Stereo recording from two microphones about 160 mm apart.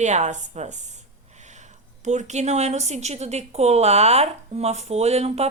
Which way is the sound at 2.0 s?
45° right (ahead or behind).